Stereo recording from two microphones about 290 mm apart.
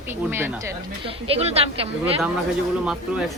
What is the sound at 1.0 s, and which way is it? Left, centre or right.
Speech, centre.